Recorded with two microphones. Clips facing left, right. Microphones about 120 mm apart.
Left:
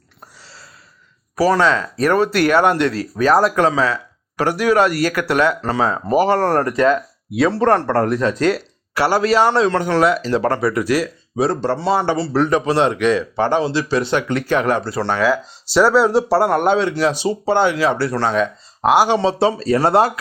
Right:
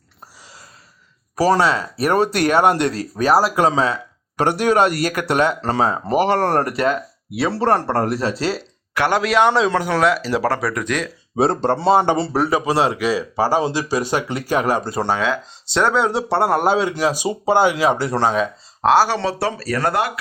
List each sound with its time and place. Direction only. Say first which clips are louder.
1.5 s speech: left 2 dB; 15° right (ahead or behind)
2.1 s speech: left 1 dB; 25° right (ahead or behind)
3.3 s speech: left 1 dB; 5° right (ahead or behind)
3.7 s speech: left 1 dB; 20° right (ahead or behind)
9.0 s speech: left 1 dB; 5° left (ahead or behind)
11.3 s speech: right 1 dB; 30° right (ahead or behind)
12.4 s speech: left 5 dB; 10° right (ahead or behind)
16.0 s speech: left 4 dB; centre (ahead or behind)
16.5 s speech: left 1 dB; 10° right (ahead or behind)
18.8 s speech: left 1 dB; 15° left (ahead or behind); by 20.1 s 30° left (ahead or behind)